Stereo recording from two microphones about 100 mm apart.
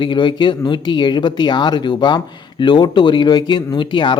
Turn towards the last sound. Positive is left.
turn(degrees=55)  # may be behind; listen again after turning